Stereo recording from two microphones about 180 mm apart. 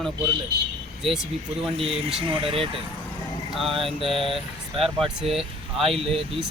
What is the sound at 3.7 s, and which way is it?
Speech, 30° right (ahead or behind).